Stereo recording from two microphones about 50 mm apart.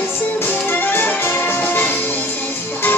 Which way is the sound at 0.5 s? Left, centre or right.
Left.